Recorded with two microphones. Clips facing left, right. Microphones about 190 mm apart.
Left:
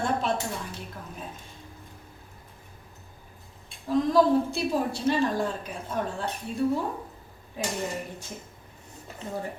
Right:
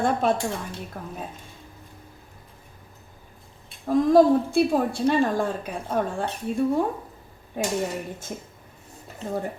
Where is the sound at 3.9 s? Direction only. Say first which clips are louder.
Right 5 dB; 50° right (ahead or behind).